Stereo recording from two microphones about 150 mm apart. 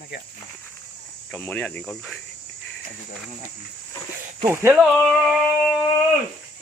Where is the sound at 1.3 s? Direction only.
10° left (ahead or behind).